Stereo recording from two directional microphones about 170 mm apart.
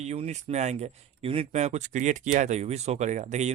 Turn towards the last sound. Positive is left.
turn(degrees=-45)  # may be behind; listen again after turning